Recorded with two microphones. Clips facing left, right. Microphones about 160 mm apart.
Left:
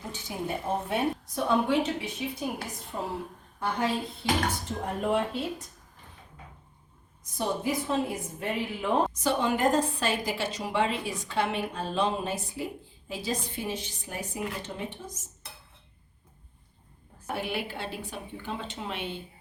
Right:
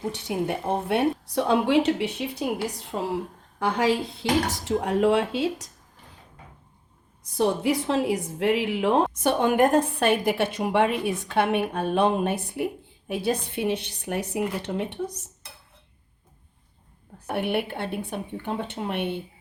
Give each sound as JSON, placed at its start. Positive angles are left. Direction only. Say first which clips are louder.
{"t": 0.1, "sound": "a woman's voice", "louder": "right 3 dB", "side_deg": -70}
{"t": 3.6, "sound": "speech", "louder": "right 6 dB", "side_deg": -90}
{"t": 7.3, "sound": "a woman's voice", "louder": "right 6 dB", "side_deg": -80}
{"t": 17.2, "sound": "a woman's voice", "louder": "right 6 dB", "side_deg": -65}